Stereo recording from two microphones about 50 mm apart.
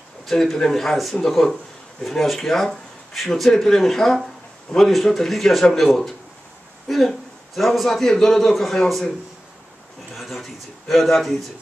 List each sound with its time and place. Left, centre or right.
0.2 s a man's voice: centre
10.1 s a man's voice: centre